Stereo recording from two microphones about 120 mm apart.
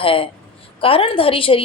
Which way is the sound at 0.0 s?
50° left (ahead or behind).